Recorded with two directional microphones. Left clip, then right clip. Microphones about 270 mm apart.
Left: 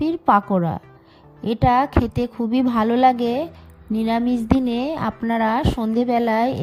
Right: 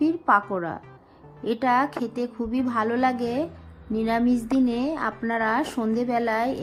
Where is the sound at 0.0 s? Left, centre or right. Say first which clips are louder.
Left 3 dB; left.